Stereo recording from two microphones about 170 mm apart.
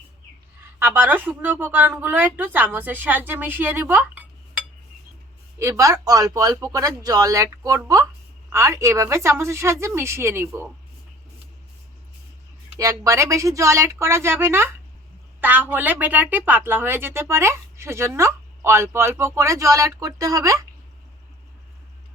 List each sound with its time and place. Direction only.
0.8 s a woman's voice: 10° right (ahead or behind)
5.5 s a woman's voice: 15° right (ahead or behind)
12.8 s a woman's voice: 20° right (ahead or behind)